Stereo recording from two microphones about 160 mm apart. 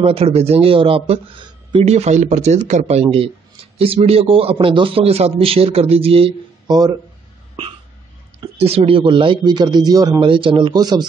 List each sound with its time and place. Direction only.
0.0 s a man's voice: 40° right (ahead or behind)
1.9 s a man's voice: 45° right (ahead or behind); by 7.0 s 25° right (ahead or behind)
8.5 s a man's voice: 40° right (ahead or behind)